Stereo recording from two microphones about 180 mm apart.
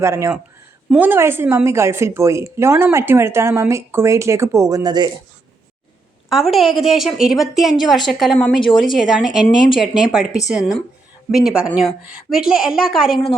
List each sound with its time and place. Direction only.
0.0 s a woman's voice: 15° right (ahead or behind)
6.3 s a woman's voice: centre (ahead or behind)